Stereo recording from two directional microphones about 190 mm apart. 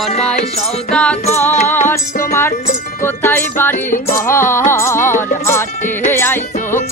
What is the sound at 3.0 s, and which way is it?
Music, 10° left (ahead or behind).